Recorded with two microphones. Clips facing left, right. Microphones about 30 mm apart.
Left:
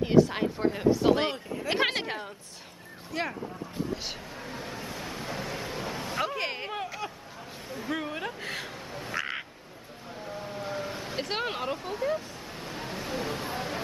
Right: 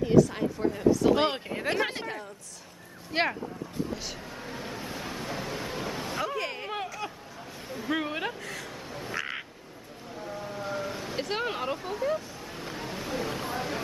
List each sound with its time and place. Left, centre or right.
0.0 s speech: left
1.3 s speech: right
1.7 s speech: left
3.1 s speech: right
3.9 s speech: left
4.4 s a sound: centre
6.2 s speech: left
7.0 s hubbub: centre
7.9 s speech: centre
8.4 s speech: left
8.9 s quack: centre
10.2 s vehicle: centre
11.6 s speech: centre
12.7 s a sound: centre